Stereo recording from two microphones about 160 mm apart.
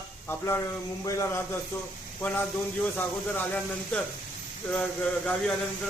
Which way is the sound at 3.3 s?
10° left (ahead or behind).